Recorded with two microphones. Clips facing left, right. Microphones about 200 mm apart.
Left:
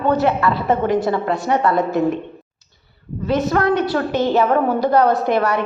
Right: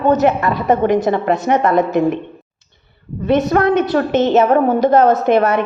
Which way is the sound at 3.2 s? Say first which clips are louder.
Right 4 dB; 20° right (ahead or behind).